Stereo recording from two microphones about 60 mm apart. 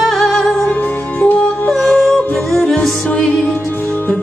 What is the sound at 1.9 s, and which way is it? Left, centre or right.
Yodeling, centre.